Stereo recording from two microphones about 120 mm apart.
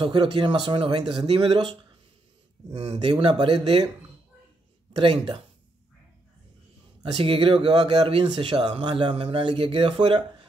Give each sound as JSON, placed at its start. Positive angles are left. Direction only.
{"t": 0.0, "sound": "speech", "side_deg": -40}
{"t": 7.0, "sound": "speech", "side_deg": -45}